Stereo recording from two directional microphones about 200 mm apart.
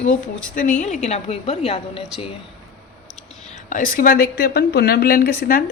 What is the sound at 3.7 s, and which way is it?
A woman's voice, 45° left (ahead or behind).